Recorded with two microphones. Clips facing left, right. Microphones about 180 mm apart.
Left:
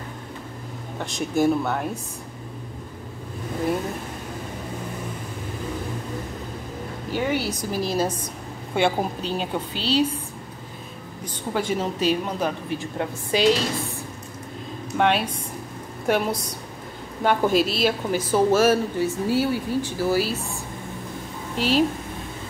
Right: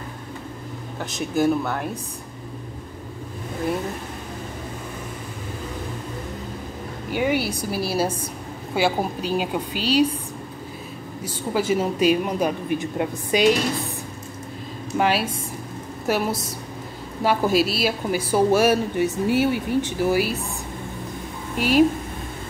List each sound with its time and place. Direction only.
0.9 s speech: centre (ahead or behind)
7.1 s a woman's voice: 15° right (ahead or behind)
11.2 s a woman's voice: 5° right (ahead or behind)
15.0 s a woman's voice: 5° right (ahead or behind)
21.5 s a woman's voice: 10° right (ahead or behind)